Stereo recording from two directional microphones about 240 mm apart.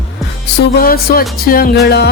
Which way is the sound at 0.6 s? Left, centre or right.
Left.